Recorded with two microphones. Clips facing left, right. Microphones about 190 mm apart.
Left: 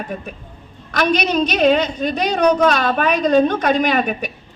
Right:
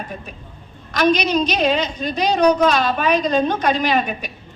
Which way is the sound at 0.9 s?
55° left (ahead or behind).